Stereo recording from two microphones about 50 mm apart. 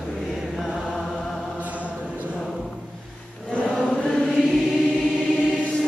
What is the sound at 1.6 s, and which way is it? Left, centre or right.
Chant, right.